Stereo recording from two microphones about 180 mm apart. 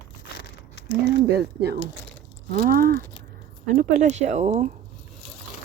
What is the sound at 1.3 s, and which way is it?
Speech, 65° right (ahead or behind).